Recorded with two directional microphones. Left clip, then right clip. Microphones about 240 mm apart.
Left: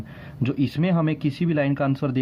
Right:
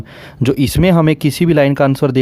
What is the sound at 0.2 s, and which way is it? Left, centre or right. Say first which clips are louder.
Speech: right 10 dB; right.